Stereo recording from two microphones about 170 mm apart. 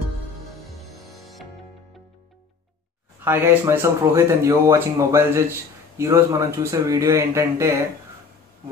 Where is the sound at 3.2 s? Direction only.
15° right (ahead or behind).